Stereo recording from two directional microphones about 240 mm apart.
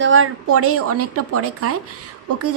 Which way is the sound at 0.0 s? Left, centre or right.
Right.